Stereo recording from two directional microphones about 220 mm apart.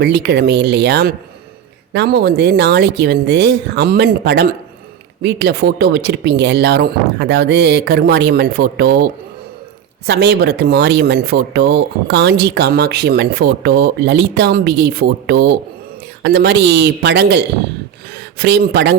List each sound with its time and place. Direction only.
0.0 s speech: 50° right (ahead or behind)
10.1 s speech: 50° right (ahead or behind)